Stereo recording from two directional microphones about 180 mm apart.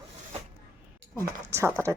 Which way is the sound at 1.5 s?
15° right (ahead or behind).